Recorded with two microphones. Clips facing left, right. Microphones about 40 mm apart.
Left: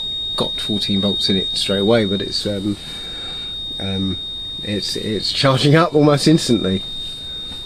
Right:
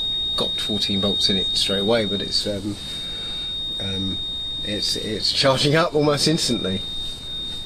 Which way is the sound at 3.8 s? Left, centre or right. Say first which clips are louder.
Left 6 dB; centre.